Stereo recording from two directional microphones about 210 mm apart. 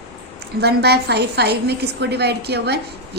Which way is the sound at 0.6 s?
50° right (ahead or behind).